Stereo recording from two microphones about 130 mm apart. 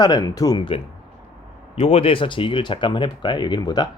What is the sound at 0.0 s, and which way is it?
Speech, 30° left (ahead or behind).